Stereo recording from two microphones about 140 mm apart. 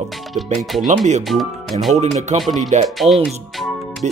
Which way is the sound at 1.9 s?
55° right (ahead or behind).